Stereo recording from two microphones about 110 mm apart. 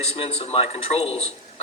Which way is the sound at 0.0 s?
70° left (ahead or behind).